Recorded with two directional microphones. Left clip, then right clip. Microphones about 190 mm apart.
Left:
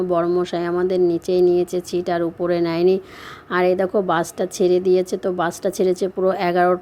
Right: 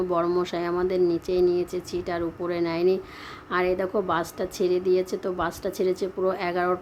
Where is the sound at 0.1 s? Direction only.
20° left (ahead or behind).